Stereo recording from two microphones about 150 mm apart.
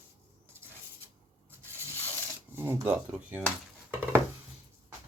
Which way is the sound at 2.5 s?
15° right (ahead or behind).